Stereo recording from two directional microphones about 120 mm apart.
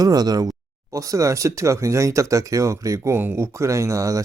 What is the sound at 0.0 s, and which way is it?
Speech, 35° right (ahead or behind).